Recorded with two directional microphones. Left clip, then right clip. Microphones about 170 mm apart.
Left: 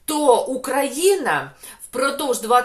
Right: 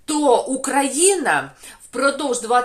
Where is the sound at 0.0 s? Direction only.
5° right (ahead or behind).